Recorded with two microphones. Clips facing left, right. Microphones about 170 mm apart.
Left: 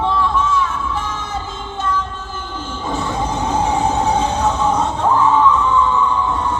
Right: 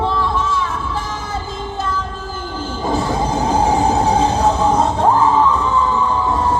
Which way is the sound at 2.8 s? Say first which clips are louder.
Right 3 dB; 35° right (ahead or behind).